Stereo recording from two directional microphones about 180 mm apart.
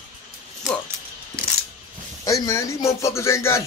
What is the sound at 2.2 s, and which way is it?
Speech, 20° left (ahead or behind).